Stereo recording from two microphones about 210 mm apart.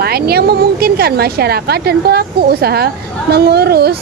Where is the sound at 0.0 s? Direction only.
50° right (ahead or behind).